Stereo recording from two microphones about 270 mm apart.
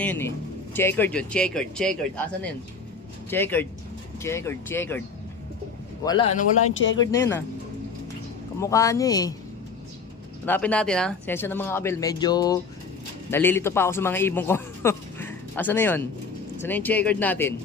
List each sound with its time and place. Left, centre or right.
0.0 s speech: centre
6.1 s speech: centre
6.6 s speech: left
7.0 s speech: centre
8.6 s speech: centre
10.4 s a man's voice: centre